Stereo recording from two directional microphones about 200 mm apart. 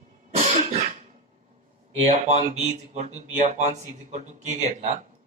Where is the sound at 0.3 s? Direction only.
35° right (ahead or behind).